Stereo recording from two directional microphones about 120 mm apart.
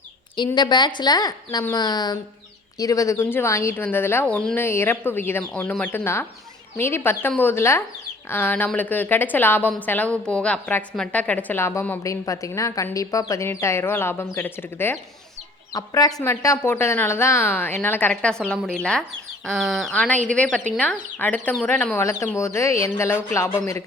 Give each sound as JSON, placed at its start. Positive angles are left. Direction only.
{"t": 0.3, "sound": "a woman's voice", "side_deg": 35}
{"t": 15.7, "sound": "a woman's voice", "side_deg": 30}
{"t": 18.1, "sound": "a woman's voice", "side_deg": 5}